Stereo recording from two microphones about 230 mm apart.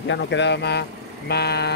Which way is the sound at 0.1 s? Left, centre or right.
Left.